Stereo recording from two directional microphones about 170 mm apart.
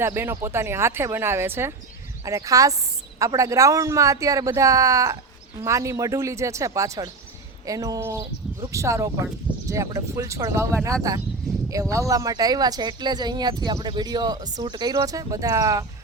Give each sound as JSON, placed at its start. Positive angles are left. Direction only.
{"t": 0.0, "sound": "speech", "side_deg": -15}